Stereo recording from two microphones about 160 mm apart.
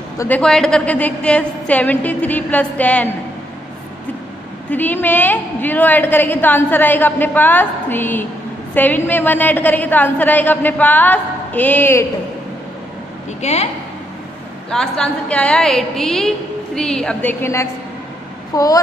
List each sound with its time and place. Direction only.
0.2 s a woman's voice: 10° left (ahead or behind)
4.6 s a woman's voice: 10° left (ahead or behind)
13.4 s speech: 40° left (ahead or behind)
14.7 s a woman's voice: 5° left (ahead or behind); by 18.8 s 20° left (ahead or behind)